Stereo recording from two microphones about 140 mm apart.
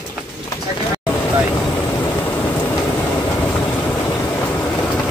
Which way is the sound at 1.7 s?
20° left (ahead or behind).